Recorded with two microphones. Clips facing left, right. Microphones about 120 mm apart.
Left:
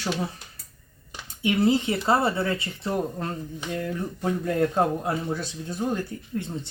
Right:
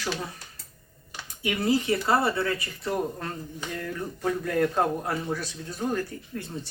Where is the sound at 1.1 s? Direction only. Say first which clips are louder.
Left 5 dB; 25° left (ahead or behind).